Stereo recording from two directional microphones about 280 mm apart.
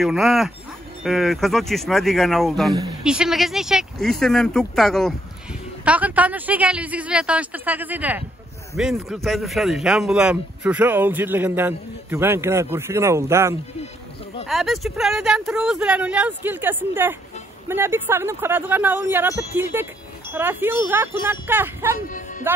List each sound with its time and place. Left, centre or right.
0.0 s speech: centre
22.0 s speech: left